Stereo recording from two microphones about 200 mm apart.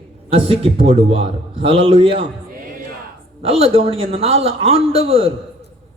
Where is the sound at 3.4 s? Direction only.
30° right (ahead or behind).